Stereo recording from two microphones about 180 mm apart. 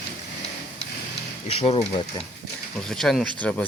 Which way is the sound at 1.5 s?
30° left (ahead or behind).